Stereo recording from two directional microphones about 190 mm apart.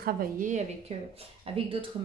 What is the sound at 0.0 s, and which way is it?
A woman's voice, 45° right (ahead or behind).